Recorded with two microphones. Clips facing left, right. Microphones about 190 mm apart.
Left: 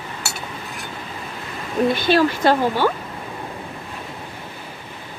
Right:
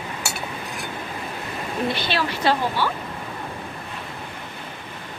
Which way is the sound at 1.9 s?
45° left (ahead or behind).